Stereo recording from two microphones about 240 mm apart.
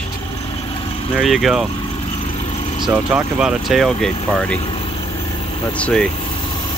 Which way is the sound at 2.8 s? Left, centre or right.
Centre.